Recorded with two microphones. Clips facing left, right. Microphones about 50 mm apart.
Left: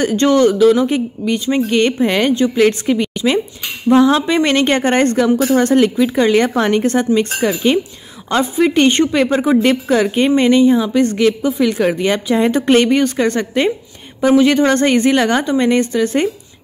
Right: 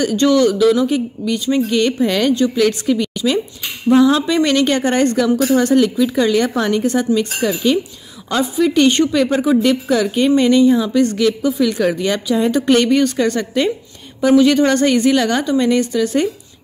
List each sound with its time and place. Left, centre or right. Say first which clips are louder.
0.0 s a woman's voice: left 1 dB; left